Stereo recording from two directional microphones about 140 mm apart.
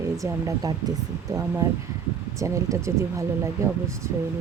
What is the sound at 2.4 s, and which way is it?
Speech, 20° right (ahead or behind).